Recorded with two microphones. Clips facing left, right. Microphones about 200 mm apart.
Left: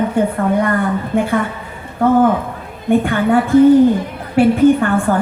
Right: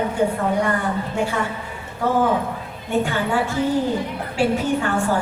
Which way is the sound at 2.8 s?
55° left (ahead or behind).